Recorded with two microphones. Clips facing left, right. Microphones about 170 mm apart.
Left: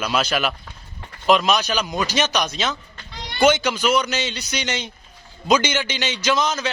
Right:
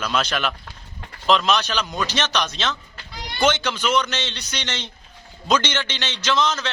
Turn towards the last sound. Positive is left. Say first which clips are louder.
# left 1 dB
turn(degrees=10)  # may be behind; listen again after turning